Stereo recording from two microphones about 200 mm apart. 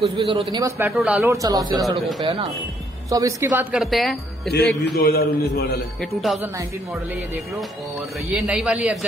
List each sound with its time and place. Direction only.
0.0 s speech: 30° right (ahead or behind)
0.5 s speech: 15° right (ahead or behind)
3.7 s speech: centre (ahead or behind)
4.8 s a man's voice: 55° left (ahead or behind)
5.9 s speech: centre (ahead or behind)
8.4 s speech: 5° right (ahead or behind)